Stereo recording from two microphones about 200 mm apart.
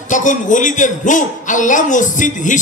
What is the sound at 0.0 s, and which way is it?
A man's voice, 40° left (ahead or behind).